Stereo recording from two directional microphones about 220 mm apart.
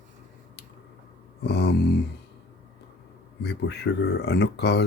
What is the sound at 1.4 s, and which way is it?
Speech, 50° left (ahead or behind).